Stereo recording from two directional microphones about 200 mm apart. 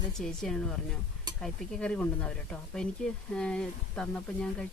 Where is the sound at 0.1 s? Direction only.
Centre (ahead or behind).